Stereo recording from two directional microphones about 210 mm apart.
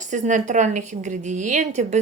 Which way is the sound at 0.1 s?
35° right (ahead or behind).